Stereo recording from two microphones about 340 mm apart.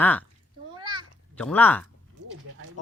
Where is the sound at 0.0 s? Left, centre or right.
Centre.